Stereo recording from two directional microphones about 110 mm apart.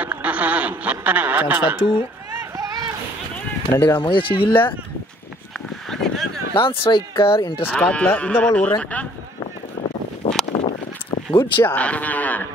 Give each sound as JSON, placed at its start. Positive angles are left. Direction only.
{"t": 0.0, "sound": "speech", "side_deg": -15}
{"t": 2.5, "sound": "vehicle", "side_deg": -30}
{"t": 3.7, "sound": "speech", "side_deg": 20}
{"t": 4.0, "sound": "speech", "side_deg": 50}
{"t": 5.9, "sound": "a sound", "side_deg": 5}
{"t": 6.5, "sound": "speech", "side_deg": 55}
{"t": 7.6, "sound": "speech", "side_deg": 10}
{"t": 9.4, "sound": "a sound", "side_deg": 75}
{"t": 11.6, "sound": "speech", "side_deg": 15}